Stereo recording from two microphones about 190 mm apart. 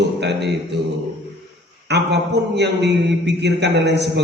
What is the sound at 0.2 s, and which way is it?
Mantra, 65° right (ahead or behind).